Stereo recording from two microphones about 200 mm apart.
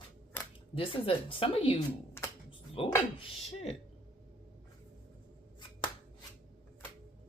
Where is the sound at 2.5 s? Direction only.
25° left (ahead or behind).